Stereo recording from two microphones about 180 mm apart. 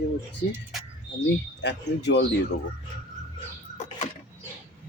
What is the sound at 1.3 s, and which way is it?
Speech, 75° left (ahead or behind).